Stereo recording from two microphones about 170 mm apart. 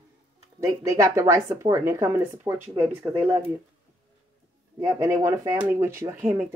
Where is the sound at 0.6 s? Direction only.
20° right (ahead or behind).